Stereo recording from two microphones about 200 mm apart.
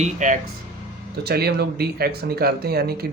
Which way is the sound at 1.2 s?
50° right (ahead or behind).